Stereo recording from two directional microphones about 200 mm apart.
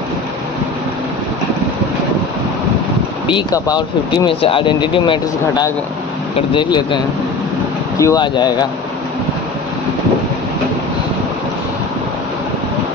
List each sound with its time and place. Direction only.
3.3 s speech: 20° left (ahead or behind)
8.0 s speech: 20° left (ahead or behind)